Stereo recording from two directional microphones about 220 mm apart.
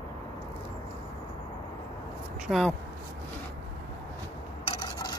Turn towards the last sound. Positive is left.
turn(degrees=20)  # may be behind; listen again after turning